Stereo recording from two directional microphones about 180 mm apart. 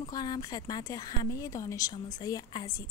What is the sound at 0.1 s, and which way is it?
A woman's voice, 20° left (ahead or behind).